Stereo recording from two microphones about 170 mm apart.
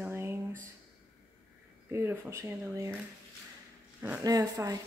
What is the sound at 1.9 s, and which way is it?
A woman's voice, 15° right (ahead or behind).